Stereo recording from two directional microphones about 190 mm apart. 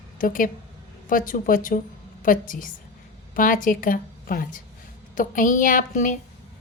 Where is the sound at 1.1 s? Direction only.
45° left (ahead or behind).